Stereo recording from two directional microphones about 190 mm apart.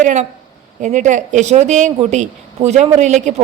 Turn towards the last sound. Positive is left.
turn(degrees=-40)  # may be behind; listen again after turning